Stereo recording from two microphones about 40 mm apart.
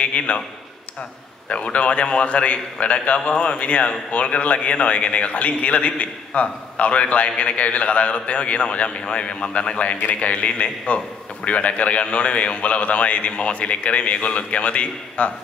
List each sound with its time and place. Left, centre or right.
0.0 s a man's voice: left
1.5 s a man's voice: left